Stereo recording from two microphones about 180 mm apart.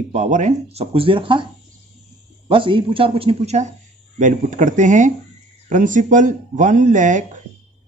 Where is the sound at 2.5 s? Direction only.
30° right (ahead or behind).